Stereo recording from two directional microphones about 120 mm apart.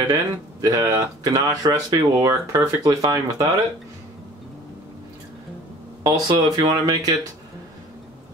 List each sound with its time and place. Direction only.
0.1 s speech: 30° right (ahead or behind)
6.0 s speech: 35° right (ahead or behind)